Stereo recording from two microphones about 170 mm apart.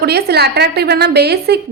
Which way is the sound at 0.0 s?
70° right (ahead or behind).